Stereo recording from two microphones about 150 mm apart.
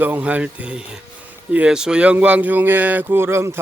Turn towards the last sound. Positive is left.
turn(degrees=-15)  # may be behind; listen again after turning